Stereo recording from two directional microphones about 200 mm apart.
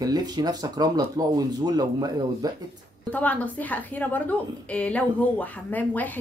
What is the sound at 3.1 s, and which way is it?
A woman's voice, 5° left (ahead or behind).